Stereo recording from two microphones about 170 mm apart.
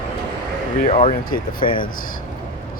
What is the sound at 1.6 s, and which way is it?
Speech, 30° left (ahead or behind).